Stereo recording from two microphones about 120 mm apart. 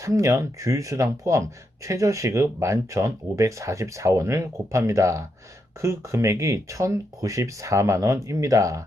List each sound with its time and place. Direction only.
0.0 s speech: 25° right (ahead or behind)